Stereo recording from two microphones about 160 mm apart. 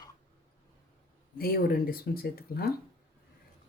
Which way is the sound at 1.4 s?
70° left (ahead or behind).